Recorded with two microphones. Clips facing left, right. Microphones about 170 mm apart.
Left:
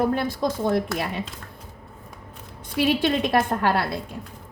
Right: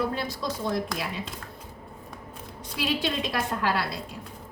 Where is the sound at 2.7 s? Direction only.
55° left (ahead or behind).